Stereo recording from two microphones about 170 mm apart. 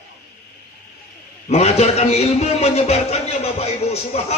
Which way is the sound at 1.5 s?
40° left (ahead or behind).